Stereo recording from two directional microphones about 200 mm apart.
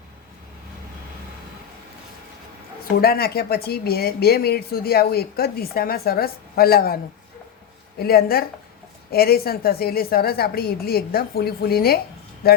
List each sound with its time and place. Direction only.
3.0 s speech: 50° left (ahead or behind)